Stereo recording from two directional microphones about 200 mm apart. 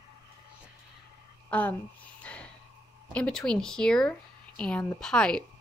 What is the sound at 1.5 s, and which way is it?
Speech, 10° left (ahead or behind).